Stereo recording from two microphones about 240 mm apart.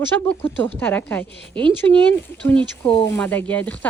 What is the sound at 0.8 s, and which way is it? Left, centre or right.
Speech, centre.